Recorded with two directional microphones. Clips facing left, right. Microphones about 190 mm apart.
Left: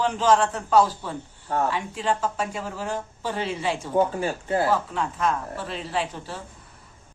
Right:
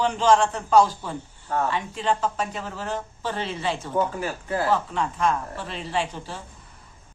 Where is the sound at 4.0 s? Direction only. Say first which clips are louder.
Left 5 dB; 25° left (ahead or behind).